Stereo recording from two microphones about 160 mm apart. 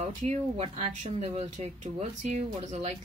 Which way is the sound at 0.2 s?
45° right (ahead or behind).